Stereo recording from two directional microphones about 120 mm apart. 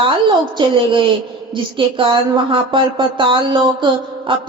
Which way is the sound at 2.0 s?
45° right (ahead or behind).